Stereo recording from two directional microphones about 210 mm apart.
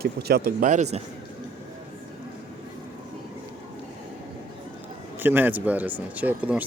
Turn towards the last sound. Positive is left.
turn(degrees=-5)  # may be behind; listen again after turning